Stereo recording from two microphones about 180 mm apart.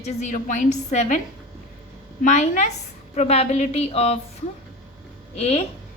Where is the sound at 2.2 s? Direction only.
40° left (ahead or behind).